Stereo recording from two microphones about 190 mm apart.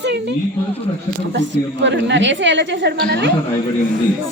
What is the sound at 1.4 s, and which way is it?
Speech, 70° right (ahead or behind).